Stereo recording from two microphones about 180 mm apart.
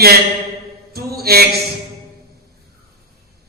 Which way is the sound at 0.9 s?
60° right (ahead or behind).